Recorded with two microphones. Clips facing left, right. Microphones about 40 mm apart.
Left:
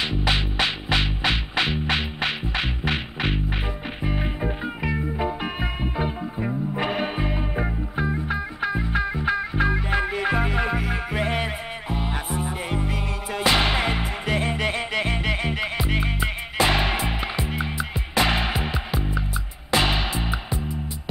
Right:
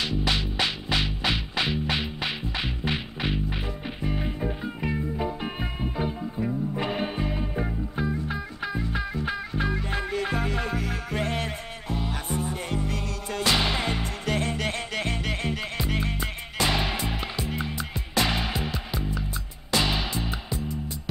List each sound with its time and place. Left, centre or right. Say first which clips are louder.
0.0 s music: left 3 dB; left